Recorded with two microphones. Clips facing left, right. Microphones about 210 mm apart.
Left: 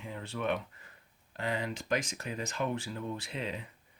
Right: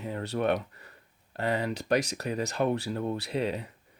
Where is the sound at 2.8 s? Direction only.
55° right (ahead or behind); by 3.6 s 40° right (ahead or behind).